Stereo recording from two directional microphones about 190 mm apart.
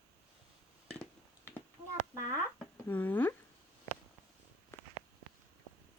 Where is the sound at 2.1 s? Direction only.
15° right (ahead or behind).